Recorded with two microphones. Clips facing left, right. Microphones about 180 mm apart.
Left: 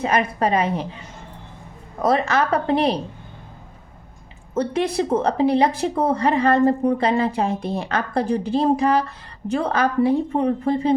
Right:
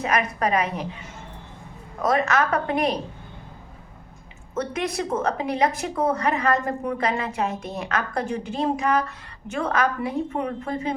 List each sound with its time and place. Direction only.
0.0 s a woman's voice: 30° left (ahead or behind)
2.0 s a woman's voice: 30° left (ahead or behind)
4.5 s a woman's voice: 30° left (ahead or behind)